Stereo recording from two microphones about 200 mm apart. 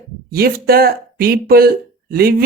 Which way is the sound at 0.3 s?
50° right (ahead or behind).